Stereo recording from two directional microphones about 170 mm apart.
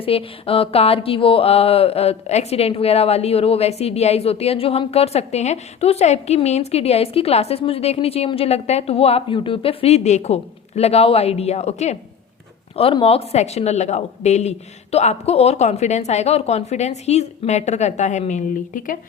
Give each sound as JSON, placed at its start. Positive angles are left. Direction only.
{"t": 0.0, "sound": "speech", "side_deg": 35}